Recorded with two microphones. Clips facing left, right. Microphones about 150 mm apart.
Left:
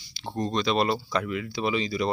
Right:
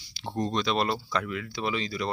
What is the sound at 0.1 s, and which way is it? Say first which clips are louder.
Speech: left 1 dB; 5° right (ahead or behind).